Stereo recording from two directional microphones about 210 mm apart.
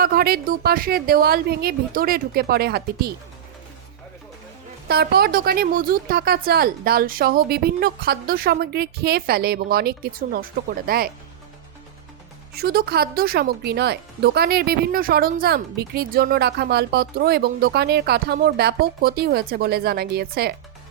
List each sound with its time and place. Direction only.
0.0 s speech: 45° right (ahead or behind)
4.9 s speech: 50° right (ahead or behind)
12.5 s speech: 45° right (ahead or behind)